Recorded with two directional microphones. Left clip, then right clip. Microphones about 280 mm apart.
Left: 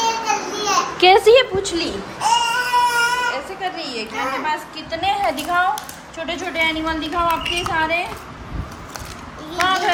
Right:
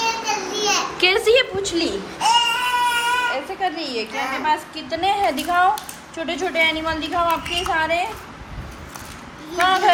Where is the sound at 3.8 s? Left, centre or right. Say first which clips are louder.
Even; centre.